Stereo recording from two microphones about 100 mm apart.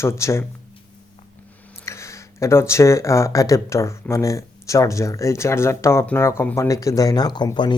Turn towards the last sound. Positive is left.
turn(degrees=45)  # may be behind; listen again after turning